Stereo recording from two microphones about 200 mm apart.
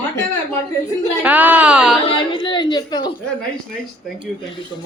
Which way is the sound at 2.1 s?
25° left (ahead or behind).